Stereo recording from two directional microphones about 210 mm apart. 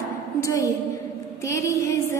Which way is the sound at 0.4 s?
15° left (ahead or behind).